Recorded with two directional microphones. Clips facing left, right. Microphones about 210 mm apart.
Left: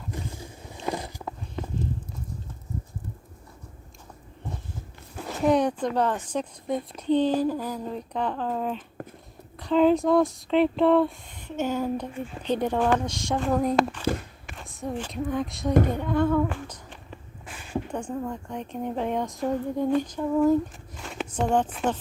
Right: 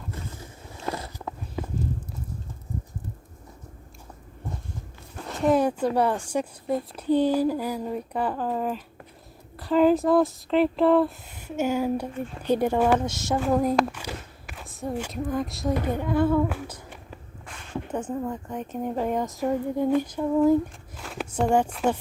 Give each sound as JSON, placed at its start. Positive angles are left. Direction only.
{"t": 0.9, "sound": "biting", "side_deg": 15}
{"t": 5.1, "sound": "a woman's voice", "side_deg": 0}
{"t": 17.4, "sound": "a sound", "side_deg": 5}
{"t": 17.8, "sound": "a woman's voice", "side_deg": -5}